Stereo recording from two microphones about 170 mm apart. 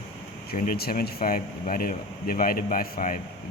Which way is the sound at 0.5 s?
60° left (ahead or behind).